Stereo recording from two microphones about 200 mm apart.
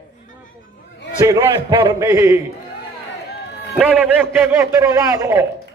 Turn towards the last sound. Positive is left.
turn(degrees=-15)  # may be behind; listen again after turning